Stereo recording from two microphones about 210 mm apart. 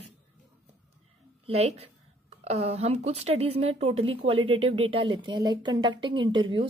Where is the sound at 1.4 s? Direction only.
30° right (ahead or behind).